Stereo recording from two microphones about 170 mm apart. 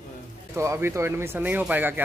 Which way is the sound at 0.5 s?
15° right (ahead or behind).